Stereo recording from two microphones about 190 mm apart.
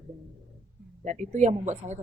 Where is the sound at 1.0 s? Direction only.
40° right (ahead or behind).